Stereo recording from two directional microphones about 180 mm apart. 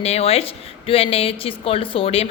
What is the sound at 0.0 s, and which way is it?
A woman's voice, 35° left (ahead or behind).